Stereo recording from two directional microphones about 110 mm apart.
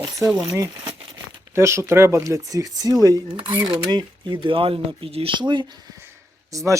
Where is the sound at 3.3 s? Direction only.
50° right (ahead or behind).